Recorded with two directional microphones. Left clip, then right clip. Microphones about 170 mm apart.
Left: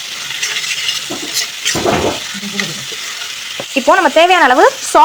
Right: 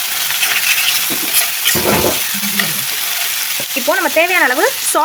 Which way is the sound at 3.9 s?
10° left (ahead or behind).